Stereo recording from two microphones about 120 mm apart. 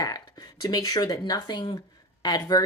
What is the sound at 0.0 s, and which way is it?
Speech, 30° left (ahead or behind).